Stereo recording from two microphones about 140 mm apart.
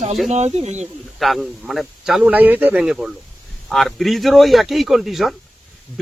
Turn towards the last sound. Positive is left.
turn(degrees=0)  # may be behind; listen again after turning